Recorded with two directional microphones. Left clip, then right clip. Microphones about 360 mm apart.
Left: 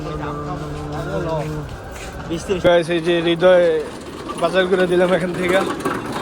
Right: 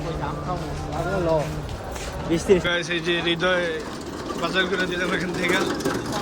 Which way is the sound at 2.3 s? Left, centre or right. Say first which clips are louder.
Right 4 dB; right.